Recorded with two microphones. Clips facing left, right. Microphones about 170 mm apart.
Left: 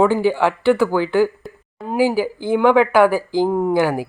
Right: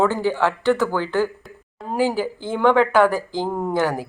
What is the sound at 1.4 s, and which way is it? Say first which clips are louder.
Speech: left 5 dB; centre (ahead or behind).